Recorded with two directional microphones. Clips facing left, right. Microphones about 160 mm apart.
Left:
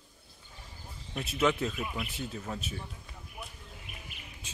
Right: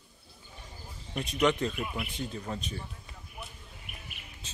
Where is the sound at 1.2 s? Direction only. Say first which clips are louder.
Right 1 dB; 5° left (ahead or behind).